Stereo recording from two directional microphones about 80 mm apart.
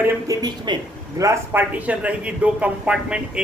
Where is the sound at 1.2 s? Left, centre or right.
Right.